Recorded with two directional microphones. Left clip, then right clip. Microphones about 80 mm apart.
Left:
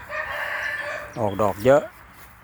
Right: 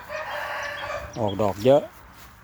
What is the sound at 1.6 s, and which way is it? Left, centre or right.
Speech, right.